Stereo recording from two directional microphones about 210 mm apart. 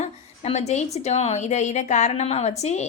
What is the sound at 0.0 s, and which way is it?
A woman's voice, 30° left (ahead or behind).